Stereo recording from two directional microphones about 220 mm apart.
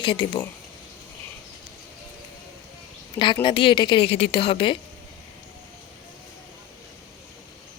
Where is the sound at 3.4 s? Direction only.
25° left (ahead or behind).